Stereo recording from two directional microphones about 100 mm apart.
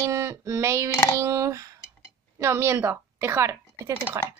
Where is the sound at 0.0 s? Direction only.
30° right (ahead or behind).